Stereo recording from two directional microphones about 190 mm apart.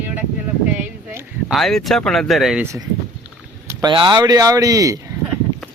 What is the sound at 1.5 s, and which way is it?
Speech, centre (ahead or behind).